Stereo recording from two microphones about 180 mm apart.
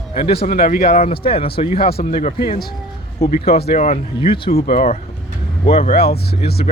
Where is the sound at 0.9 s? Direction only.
35° left (ahead or behind).